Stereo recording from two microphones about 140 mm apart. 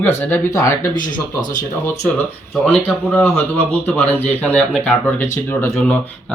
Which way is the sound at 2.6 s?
10° left (ahead or behind).